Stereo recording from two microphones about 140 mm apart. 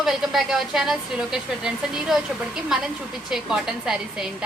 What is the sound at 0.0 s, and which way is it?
A woman's voice, 5° right (ahead or behind).